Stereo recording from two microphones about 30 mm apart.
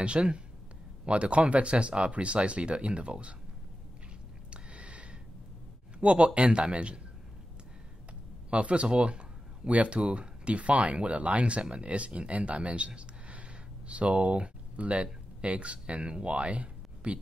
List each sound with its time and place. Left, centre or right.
0.0 s a man's voice: right
4.5 s a sound: right
5.9 s speech: right
8.5 s speech: right